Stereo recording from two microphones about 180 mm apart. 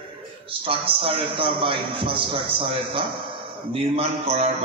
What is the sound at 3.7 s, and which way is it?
Speech, 35° right (ahead or behind).